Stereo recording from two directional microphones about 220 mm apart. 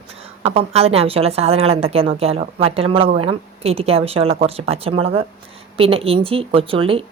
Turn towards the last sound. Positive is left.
turn(degrees=-25)  # may be behind; listen again after turning